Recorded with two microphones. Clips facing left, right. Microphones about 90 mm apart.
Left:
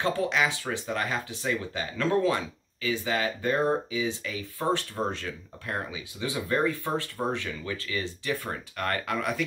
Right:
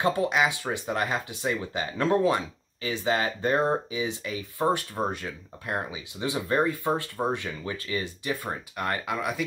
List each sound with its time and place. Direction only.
0.0 s speech: 20° right (ahead or behind)